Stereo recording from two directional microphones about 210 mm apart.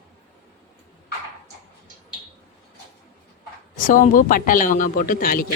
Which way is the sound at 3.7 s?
40° left (ahead or behind).